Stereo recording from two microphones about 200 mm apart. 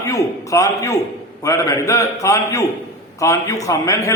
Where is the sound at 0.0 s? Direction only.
15° left (ahead or behind).